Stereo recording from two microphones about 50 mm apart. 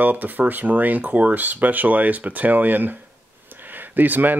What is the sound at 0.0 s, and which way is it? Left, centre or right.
Speech, right.